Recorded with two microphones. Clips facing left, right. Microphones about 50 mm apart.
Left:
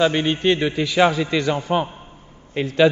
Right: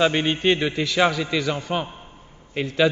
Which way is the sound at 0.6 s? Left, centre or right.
Centre.